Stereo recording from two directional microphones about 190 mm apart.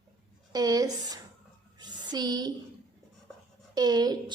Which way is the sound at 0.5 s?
20° right (ahead or behind).